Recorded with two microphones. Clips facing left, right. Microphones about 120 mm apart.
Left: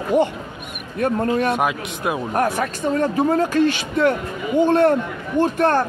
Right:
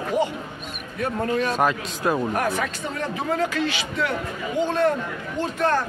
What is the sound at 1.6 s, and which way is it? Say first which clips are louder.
Speech: even; 10° left (ahead or behind).